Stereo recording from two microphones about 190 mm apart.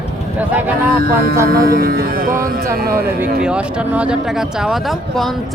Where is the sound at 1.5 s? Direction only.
50° right (ahead or behind).